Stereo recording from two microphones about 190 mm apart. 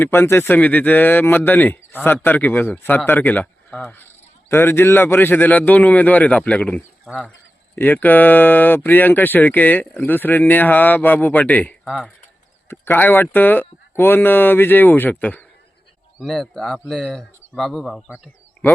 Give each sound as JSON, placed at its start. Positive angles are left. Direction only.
{"t": 0.0, "sound": "speech", "side_deg": 10}